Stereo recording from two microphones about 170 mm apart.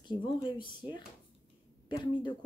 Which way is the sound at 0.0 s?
25° left (ahead or behind).